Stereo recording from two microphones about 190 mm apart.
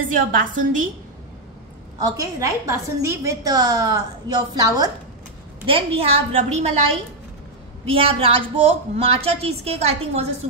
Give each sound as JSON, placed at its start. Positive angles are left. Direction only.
{"t": 0.1, "sound": "a woman's voice", "side_deg": -45}
{"t": 2.0, "sound": "a woman's voice", "side_deg": -20}
{"t": 5.7, "sound": "a woman's voice", "side_deg": -30}